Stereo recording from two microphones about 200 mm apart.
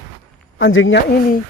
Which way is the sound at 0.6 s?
80° left.